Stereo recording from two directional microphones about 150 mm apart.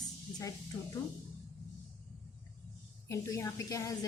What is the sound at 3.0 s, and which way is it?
A woman's voice, 20° left (ahead or behind).